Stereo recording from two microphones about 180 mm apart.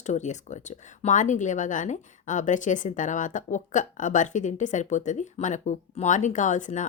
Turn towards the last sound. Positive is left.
turn(degrees=45)  # may be behind; listen again after turning